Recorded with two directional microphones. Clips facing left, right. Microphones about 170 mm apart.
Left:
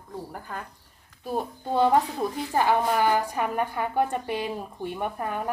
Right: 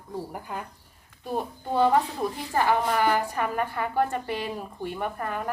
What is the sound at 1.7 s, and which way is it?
Speech, 20° left (ahead or behind).